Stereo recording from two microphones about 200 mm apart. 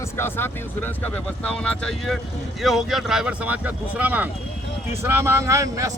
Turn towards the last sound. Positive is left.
turn(degrees=-15)  # may be behind; listen again after turning